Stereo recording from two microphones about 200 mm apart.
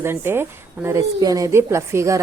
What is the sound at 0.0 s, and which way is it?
A woman's voice, 10° right (ahead or behind).